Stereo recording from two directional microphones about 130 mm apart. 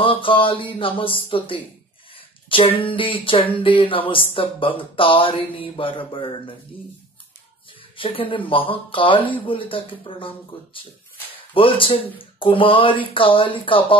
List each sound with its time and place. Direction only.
0.0 s speech: 45° left (ahead or behind)
8.0 s speech: 45° left (ahead or behind)